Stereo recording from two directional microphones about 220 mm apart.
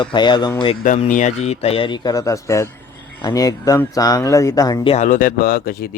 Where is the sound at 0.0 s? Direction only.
20° left (ahead or behind).